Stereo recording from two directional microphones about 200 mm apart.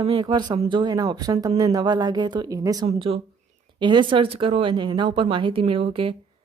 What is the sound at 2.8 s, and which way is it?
Speech, 25° right (ahead or behind).